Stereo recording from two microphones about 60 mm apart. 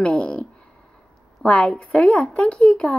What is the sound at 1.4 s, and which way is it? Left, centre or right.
A woman's voice, centre.